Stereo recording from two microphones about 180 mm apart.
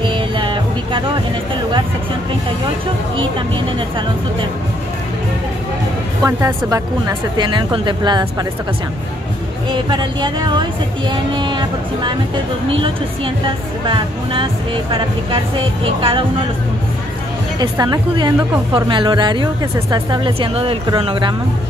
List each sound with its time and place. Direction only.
0.0 s music: 25° right (ahead or behind)
6.2 s speech: 20° right (ahead or behind)
9.7 s speech: 25° right (ahead or behind)
13.8 s speech: 30° right (ahead or behind)
17.6 s speech: 20° right (ahead or behind)